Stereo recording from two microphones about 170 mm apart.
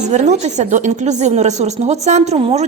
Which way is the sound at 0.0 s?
45° right (ahead or behind).